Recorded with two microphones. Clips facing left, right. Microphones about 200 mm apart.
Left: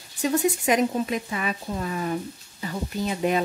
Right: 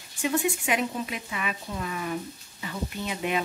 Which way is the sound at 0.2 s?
40° left (ahead or behind).